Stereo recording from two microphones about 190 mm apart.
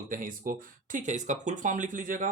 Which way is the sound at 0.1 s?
45° right (ahead or behind).